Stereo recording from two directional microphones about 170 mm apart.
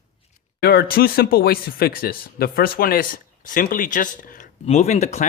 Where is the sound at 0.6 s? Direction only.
65° left (ahead or behind).